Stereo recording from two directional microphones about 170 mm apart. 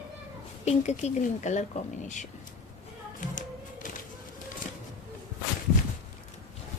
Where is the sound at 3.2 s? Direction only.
50° left (ahead or behind).